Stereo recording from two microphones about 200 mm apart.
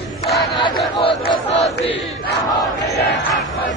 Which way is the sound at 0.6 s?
25° left (ahead or behind).